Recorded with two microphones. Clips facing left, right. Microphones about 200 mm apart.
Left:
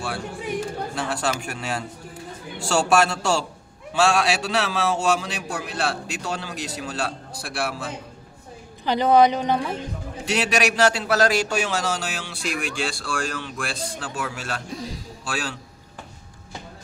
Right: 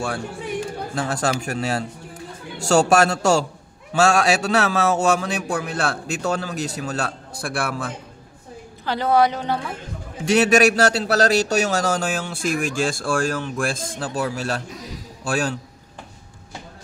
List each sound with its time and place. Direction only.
0.9 s a man's voice: 40° right (ahead or behind)
8.8 s a man's voice: 15° left (ahead or behind)
10.2 s a man's voice: 45° right (ahead or behind)